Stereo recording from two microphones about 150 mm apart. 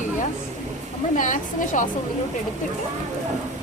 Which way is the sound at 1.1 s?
55° left (ahead or behind).